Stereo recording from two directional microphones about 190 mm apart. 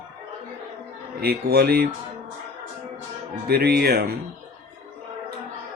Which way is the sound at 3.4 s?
55° right (ahead or behind).